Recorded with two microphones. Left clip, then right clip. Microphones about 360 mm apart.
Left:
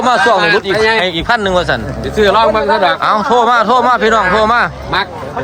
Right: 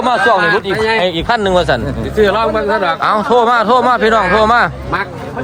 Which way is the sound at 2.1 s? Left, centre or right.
Left.